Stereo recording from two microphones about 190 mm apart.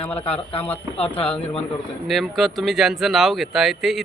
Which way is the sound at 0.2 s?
30° left (ahead or behind).